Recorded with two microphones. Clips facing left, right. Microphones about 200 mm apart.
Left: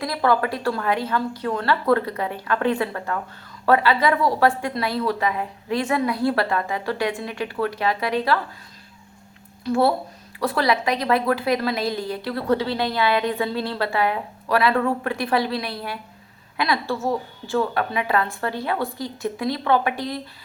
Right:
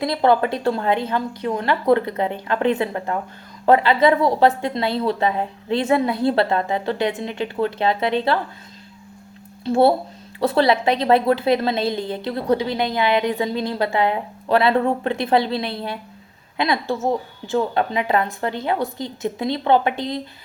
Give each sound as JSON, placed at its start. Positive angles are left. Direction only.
{"t": 0.0, "sound": "a woman's voice", "side_deg": -25}
{"t": 9.6, "sound": "a woman's voice", "side_deg": -25}